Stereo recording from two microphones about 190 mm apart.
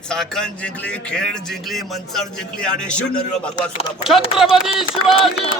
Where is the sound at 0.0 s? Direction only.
5° left (ahead or behind).